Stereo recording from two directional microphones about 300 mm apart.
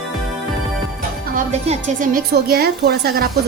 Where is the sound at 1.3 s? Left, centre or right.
Right.